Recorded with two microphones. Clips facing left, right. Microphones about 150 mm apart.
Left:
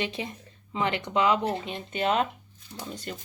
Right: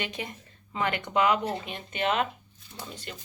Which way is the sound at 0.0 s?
30° left (ahead or behind).